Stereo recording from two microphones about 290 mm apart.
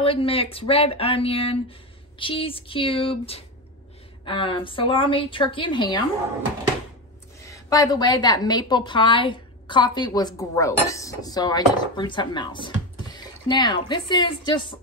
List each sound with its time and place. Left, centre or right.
0.0 s a woman's voice: centre
7.4 s a woman's voice: centre